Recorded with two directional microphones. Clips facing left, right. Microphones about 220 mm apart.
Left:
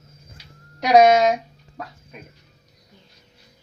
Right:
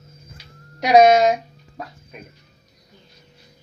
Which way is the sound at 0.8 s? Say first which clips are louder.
Right 1 dB; 5° right (ahead or behind).